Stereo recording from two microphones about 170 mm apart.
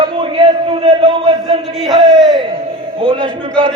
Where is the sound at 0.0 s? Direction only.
30° right (ahead or behind).